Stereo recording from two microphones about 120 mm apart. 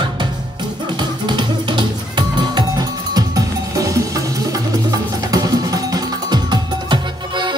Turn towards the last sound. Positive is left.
turn(degrees=-40)  # may be behind; listen again after turning